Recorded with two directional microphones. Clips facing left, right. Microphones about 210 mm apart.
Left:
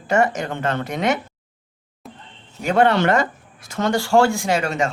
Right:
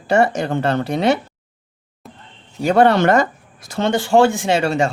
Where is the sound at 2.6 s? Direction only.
40° right (ahead or behind).